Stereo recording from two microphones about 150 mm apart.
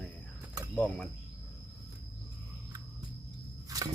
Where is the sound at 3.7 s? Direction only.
25° right (ahead or behind).